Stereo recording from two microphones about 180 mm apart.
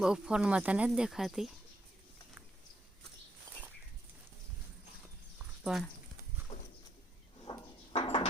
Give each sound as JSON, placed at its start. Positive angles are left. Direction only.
{"t": 0.0, "sound": "speech", "side_deg": -5}
{"t": 5.6, "sound": "speech", "side_deg": 0}
{"t": 7.5, "sound": "a sound", "side_deg": 35}